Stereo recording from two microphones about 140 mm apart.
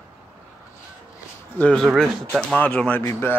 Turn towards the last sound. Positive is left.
turn(degrees=20)  # may be behind; listen again after turning